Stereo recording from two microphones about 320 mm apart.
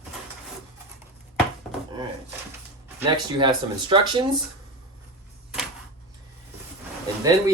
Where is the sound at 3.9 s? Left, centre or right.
Centre.